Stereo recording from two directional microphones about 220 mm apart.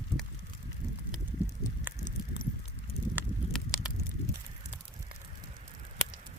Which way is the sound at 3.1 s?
5° right (ahead or behind).